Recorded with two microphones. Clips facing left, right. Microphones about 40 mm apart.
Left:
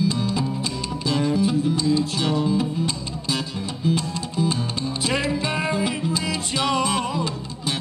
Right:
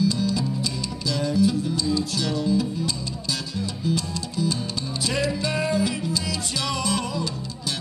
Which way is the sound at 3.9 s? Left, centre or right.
Left.